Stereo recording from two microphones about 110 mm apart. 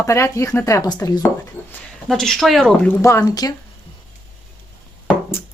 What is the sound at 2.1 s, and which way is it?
Speech, centre (ahead or behind).